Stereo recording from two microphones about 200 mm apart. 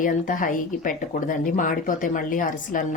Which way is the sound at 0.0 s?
40° left (ahead or behind).